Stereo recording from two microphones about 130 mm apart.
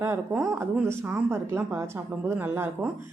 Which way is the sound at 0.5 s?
20° right (ahead or behind).